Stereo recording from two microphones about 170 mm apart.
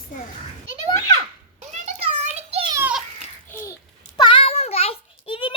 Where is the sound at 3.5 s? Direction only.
15° left (ahead or behind).